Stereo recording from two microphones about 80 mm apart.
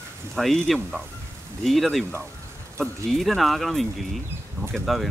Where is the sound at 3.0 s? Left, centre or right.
Centre.